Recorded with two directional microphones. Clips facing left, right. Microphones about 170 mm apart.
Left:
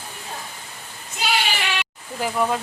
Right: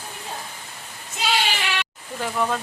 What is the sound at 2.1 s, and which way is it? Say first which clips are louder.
Speech: left 2 dB; 10° left (ahead or behind).